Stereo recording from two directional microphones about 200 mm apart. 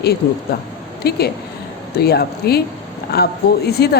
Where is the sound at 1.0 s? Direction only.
55° left (ahead or behind).